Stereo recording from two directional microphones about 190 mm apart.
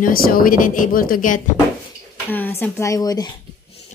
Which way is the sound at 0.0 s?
50° left (ahead or behind).